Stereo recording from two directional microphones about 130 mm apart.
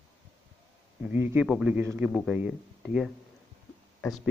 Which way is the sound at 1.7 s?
15° right (ahead or behind).